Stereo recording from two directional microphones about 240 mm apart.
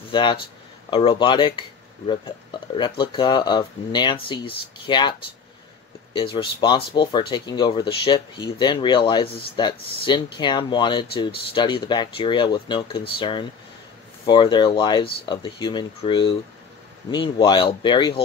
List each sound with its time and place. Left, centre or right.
0.1 s speech: centre
6.1 s speech: left